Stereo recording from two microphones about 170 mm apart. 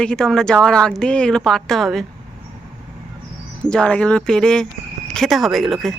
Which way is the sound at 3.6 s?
5° left (ahead or behind).